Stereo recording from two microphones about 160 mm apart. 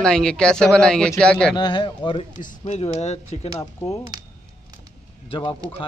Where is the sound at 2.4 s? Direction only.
45° left (ahead or behind).